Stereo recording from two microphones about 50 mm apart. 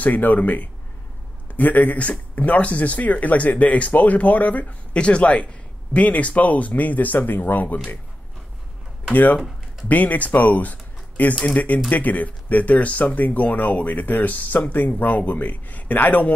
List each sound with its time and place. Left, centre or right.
0.0 s speech: left
4.9 s speech: left
9.1 s speech: left